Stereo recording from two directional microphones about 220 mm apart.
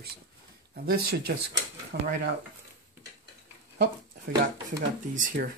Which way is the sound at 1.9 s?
45° right (ahead or behind).